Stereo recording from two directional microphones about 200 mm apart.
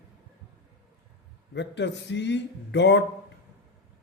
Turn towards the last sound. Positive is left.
turn(degrees=60)  # may be behind; listen again after turning